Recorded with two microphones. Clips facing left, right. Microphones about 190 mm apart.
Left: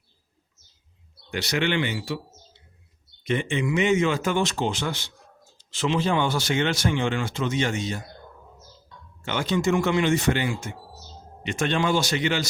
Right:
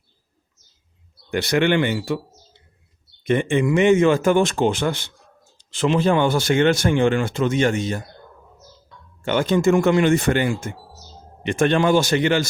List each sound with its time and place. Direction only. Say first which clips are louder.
1.3 s speech: right 7 dB; 50° right (ahead or behind)
3.2 s speech: right 6 dB; 50° right (ahead or behind)
9.2 s speech: right 6 dB; 50° right (ahead or behind)